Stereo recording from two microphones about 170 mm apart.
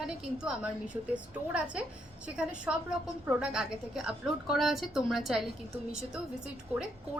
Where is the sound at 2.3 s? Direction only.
5° right (ahead or behind).